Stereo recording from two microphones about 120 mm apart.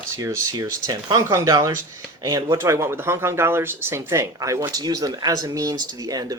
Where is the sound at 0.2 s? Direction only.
25° right (ahead or behind).